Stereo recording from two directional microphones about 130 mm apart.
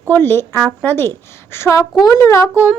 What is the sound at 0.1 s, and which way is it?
A woman's voice, 15° left (ahead or behind).